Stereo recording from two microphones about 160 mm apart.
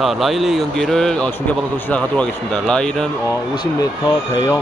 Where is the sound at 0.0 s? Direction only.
Centre (ahead or behind).